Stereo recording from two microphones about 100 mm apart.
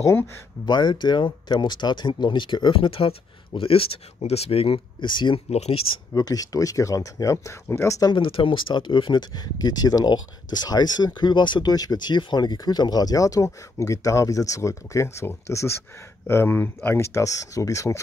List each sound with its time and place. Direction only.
0.0 s speech: 25° left (ahead or behind)
0.7 s speech: 45° left (ahead or behind)
5.5 s speech: 90° left
6.1 s speech: 40° left (ahead or behind)
8.1 s speech: 60° left (ahead or behind); by 18.0 s 30° left (ahead or behind)